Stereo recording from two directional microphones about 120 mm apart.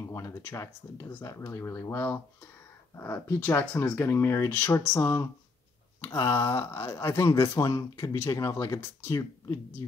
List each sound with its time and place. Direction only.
0.1 s speech: 25° left (ahead or behind)